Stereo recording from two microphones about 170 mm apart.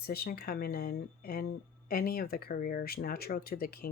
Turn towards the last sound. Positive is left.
turn(degrees=60)  # may be behind; listen again after turning